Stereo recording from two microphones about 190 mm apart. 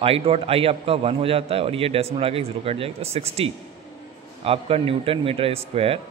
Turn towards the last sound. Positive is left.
turn(degrees=-30)  # may be behind; listen again after turning